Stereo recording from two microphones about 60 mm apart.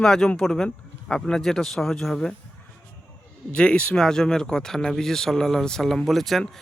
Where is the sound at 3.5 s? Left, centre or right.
Centre.